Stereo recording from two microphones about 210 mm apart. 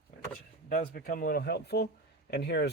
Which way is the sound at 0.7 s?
40° left (ahead or behind).